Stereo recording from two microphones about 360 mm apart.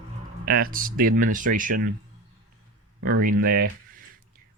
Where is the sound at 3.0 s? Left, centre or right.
Right.